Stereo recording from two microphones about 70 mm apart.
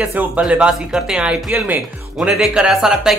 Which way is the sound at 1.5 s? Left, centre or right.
Right.